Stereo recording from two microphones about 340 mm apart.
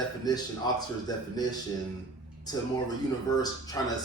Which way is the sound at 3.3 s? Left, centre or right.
Centre.